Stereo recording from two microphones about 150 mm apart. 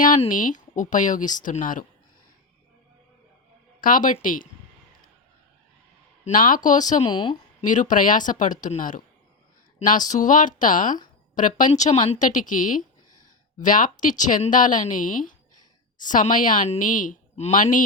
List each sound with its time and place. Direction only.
0.3 s a woman's voice: 65° left (ahead or behind)
3.8 s a woman's voice: 65° left (ahead or behind)
6.2 s a woman's voice: 65° left (ahead or behind)
7.0 s speech: 35° left (ahead or behind)
7.6 s a woman's voice: 55° left (ahead or behind)
11.9 s speech: 35° left (ahead or behind)
12.2 s a woman's voice: 60° left (ahead or behind)